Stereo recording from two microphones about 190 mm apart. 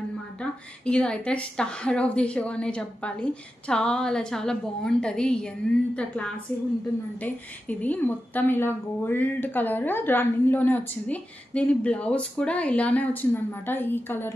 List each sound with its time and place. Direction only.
0.4 s a woman's voice: 5° left (ahead or behind)